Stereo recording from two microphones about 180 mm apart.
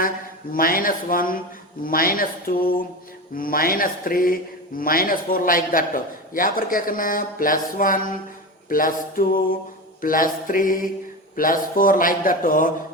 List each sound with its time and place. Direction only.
0.5 s a man's voice: 50° left (ahead or behind)